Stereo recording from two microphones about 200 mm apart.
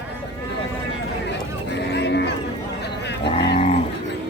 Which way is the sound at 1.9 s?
60° left (ahead or behind).